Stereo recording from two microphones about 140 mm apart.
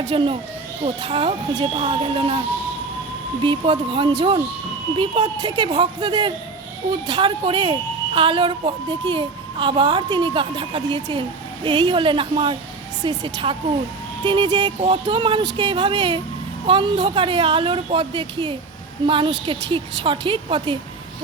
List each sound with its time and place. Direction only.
0.1 s a woman's voice: 40° right (ahead or behind)
3.4 s a woman's voice: 35° right (ahead or behind)